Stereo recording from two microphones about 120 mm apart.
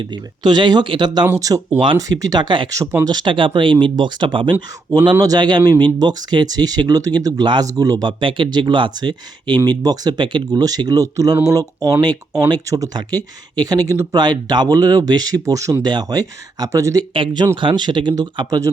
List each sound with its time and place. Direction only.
0.0 s speech: 40° right (ahead or behind)
8.2 s speech: 45° right (ahead or behind); by 14.1 s 25° right (ahead or behind)
14.1 s speech: 35° right (ahead or behind)